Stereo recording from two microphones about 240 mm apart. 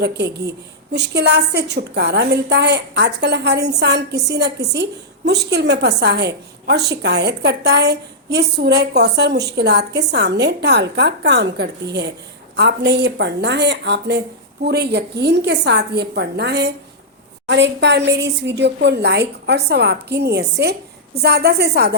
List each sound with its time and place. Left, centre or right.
0.0 s a woman's voice: right